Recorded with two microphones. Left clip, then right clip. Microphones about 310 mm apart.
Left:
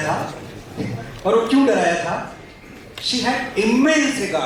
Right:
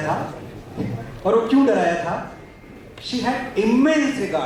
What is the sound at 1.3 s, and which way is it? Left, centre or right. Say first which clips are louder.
A man's voice: left 1 dB; centre.